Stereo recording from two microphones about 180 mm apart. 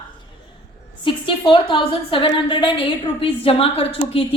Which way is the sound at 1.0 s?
30° left (ahead or behind).